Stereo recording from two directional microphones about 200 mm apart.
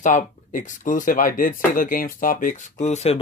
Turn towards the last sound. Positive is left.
turn(degrees=30)  # may be behind; listen again after turning